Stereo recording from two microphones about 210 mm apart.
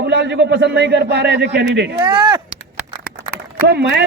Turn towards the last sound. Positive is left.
turn(degrees=-55)  # may be behind; listen again after turning